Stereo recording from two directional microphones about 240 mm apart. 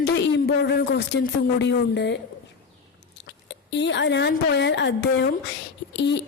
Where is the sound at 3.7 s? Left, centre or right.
Left.